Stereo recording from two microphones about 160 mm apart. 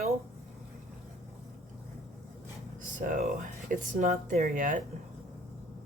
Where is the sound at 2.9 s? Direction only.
55° right (ahead or behind).